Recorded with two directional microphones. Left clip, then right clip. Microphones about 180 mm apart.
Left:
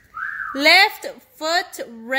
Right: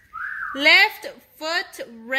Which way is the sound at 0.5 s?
20° left (ahead or behind).